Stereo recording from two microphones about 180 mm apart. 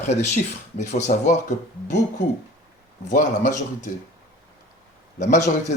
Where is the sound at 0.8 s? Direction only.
40° left (ahead or behind).